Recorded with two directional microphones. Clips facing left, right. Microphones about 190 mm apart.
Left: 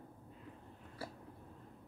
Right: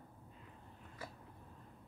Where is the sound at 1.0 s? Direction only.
35° left (ahead or behind).